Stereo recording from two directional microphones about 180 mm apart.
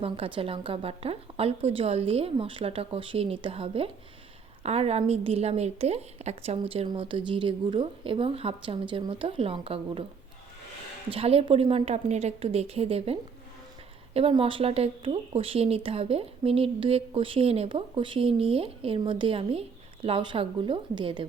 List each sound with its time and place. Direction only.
0.0 s speech: 30° right (ahead or behind)
11.1 s speech: 30° right (ahead or behind)